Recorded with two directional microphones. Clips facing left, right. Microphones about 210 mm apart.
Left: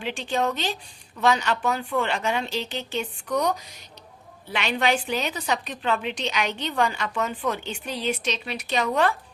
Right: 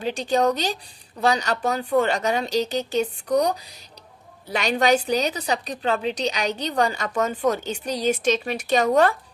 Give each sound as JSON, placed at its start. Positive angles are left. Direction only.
{"t": 0.0, "sound": "a woman's voice", "side_deg": -40}